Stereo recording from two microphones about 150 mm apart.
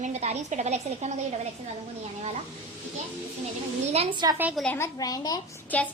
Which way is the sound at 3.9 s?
40° right (ahead or behind).